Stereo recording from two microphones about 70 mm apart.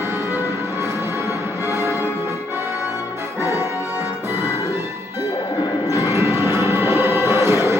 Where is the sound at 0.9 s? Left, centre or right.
Left.